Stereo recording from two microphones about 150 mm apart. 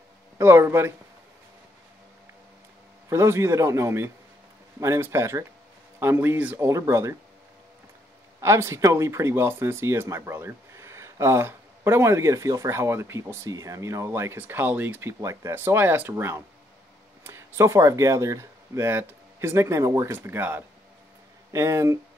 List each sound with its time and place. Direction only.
0.4 s speech: 15° right (ahead or behind)
3.1 s speech: 20° right (ahead or behind)
8.4 s speech: 20° right (ahead or behind)